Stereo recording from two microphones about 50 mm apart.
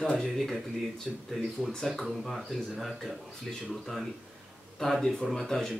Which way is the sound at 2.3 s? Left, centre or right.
Centre.